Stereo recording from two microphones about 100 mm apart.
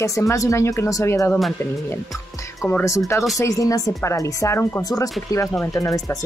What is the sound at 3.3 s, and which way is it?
Speech, 35° left (ahead or behind).